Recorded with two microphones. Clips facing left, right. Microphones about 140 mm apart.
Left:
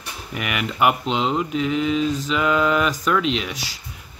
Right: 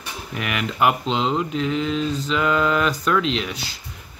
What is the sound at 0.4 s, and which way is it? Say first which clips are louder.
Speech: even; centre (ahead or behind).